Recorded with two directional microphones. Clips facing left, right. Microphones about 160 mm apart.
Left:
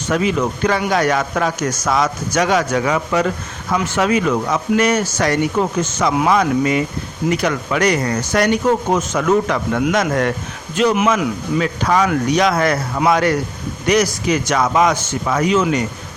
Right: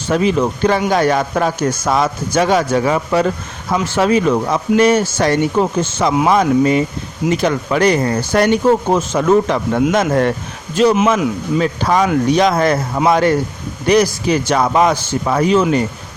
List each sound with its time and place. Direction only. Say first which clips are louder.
0.1 s a man's voice: right 3 dB; 30° right (ahead or behind)